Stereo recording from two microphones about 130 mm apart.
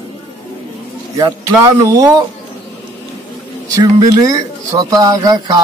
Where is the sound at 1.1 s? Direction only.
25° right (ahead or behind).